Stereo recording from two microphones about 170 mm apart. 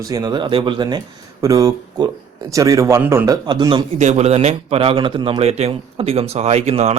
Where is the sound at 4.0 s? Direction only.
40° right (ahead or behind).